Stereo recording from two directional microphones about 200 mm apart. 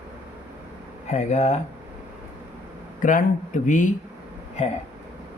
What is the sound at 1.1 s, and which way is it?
Speech, 35° left (ahead or behind).